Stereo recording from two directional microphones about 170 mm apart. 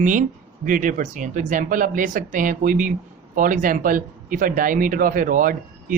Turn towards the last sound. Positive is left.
turn(degrees=-50)  # may be behind; listen again after turning